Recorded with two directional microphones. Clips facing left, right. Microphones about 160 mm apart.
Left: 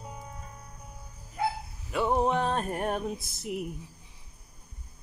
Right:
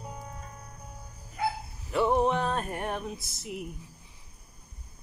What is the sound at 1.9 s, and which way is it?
Music, 15° left (ahead or behind).